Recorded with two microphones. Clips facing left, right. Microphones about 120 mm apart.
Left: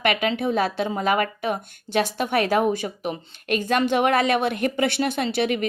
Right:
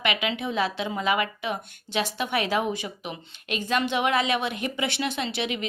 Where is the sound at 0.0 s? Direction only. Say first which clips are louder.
Left 5 dB; 45° left (ahead or behind).